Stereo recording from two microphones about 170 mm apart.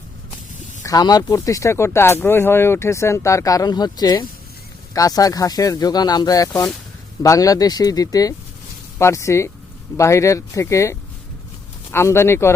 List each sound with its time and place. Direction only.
0.9 s speech: 20° left (ahead or behind)